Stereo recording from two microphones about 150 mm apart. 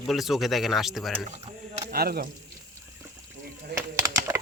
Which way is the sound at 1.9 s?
90° right.